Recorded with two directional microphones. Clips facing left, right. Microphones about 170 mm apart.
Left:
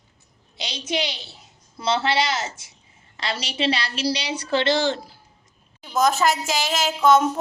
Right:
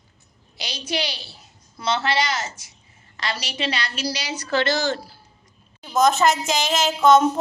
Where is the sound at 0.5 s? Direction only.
25° left (ahead or behind).